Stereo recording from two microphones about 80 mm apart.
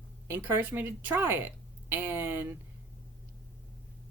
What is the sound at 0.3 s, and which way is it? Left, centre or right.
Speech, right.